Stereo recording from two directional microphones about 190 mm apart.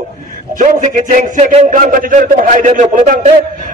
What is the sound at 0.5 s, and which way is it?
A man's voice, 40° right (ahead or behind).